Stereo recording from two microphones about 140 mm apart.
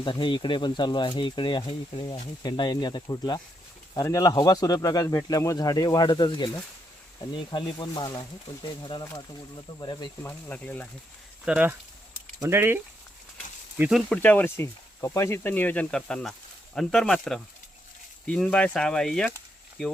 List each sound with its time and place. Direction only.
0.0 s speech: 35° left (ahead or behind)
10.2 s speech: 10° left (ahead or behind)
11.4 s speech: 10° right (ahead or behind)
14.1 s speech: 10° left (ahead or behind)